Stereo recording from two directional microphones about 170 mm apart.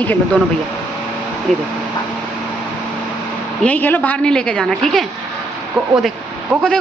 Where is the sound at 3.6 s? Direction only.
10° left (ahead or behind).